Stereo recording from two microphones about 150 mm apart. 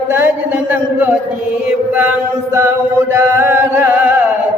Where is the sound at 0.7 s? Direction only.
10° right (ahead or behind).